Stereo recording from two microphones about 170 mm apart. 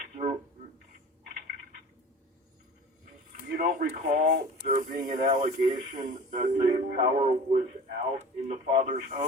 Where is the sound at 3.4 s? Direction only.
55° right (ahead or behind).